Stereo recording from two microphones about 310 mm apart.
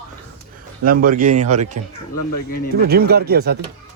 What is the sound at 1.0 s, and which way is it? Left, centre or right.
Speech, right.